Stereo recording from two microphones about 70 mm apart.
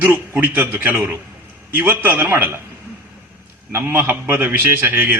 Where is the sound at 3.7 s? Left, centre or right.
Right.